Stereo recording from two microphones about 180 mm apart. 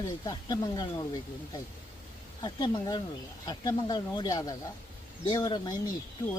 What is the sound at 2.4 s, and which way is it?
Speech, 25° left (ahead or behind).